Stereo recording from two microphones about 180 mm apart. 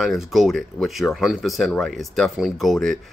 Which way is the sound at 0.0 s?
Centre (ahead or behind).